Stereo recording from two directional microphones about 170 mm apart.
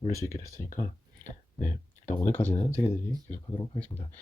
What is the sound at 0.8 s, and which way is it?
Speech, 20° left (ahead or behind).